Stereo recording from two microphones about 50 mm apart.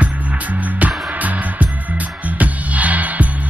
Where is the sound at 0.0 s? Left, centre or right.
Right.